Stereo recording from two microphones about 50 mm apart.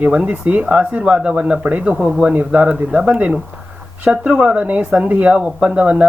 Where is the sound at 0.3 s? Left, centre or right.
Right.